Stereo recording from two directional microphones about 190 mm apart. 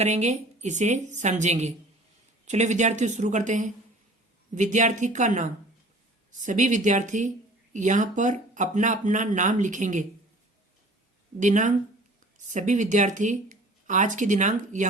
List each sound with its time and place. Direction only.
0.0 s speech: 35° right (ahead or behind)
11.3 s speech: 40° right (ahead or behind)